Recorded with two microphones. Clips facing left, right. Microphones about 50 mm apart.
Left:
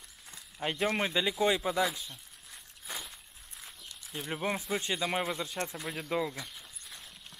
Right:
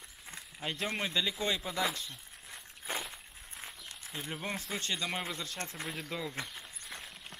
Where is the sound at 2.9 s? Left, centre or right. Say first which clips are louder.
Right 4 dB; right.